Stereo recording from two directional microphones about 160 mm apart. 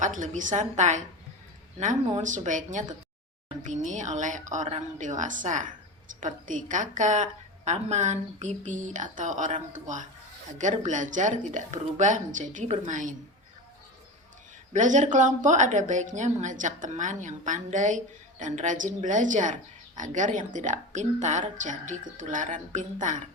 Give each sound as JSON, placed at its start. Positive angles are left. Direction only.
{"t": 0.0, "sound": "a woman's voice", "side_deg": -50}
{"t": 14.7, "sound": "a woman's voice", "side_deg": -50}